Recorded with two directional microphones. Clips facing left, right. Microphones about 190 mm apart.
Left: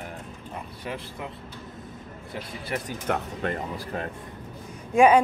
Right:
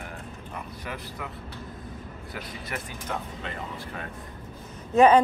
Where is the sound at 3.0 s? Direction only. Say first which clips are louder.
Left 8 dB; 60° left (ahead or behind).